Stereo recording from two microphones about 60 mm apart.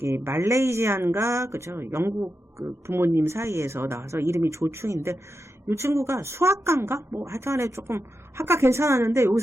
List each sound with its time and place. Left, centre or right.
0.3 s speech: right